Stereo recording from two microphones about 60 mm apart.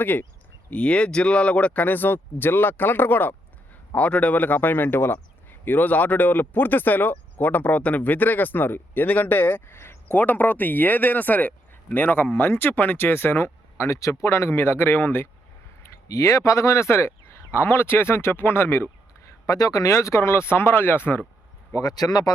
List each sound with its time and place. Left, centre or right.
0.0 s speech: left
0.7 s speech: centre
3.9 s a man's voice: left
9.7 s a sound: left
10.1 s speech: left
13.9 s speech: left
16.0 s speech: left
19.5 s speech: left
21.7 s speech: left